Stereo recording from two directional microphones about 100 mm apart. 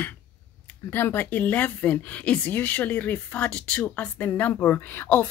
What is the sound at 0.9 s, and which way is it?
Speech, 20° left (ahead or behind).